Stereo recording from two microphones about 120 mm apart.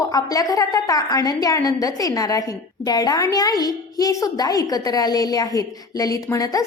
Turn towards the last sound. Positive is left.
turn(degrees=30)  # may be behind; listen again after turning